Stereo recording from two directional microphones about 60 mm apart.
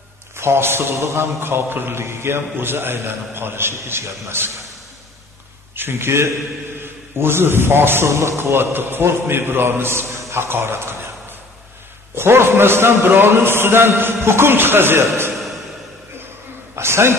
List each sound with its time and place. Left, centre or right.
0.4 s a man's voice: right
5.8 s a man's voice: right
12.2 s a man's voice: right
16.7 s a man's voice: right